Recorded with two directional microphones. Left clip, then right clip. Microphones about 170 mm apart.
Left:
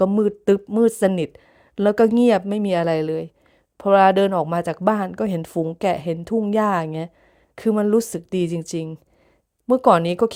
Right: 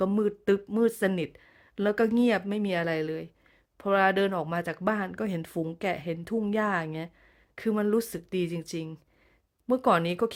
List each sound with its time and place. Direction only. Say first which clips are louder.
0.0 s speech: left 8 dB; 30° left (ahead or behind)